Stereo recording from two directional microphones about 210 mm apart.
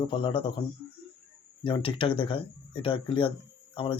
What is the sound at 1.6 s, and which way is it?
Speech, 25° left (ahead or behind).